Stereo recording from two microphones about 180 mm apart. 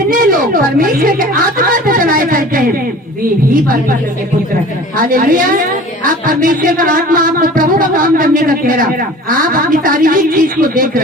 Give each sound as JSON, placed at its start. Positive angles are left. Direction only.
{"t": 0.1, "sound": "speech", "side_deg": -50}
{"t": 3.5, "sound": "music", "side_deg": -50}
{"t": 4.9, "sound": "music", "side_deg": -50}